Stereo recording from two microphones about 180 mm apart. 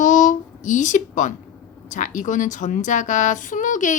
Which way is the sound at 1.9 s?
45° left (ahead or behind).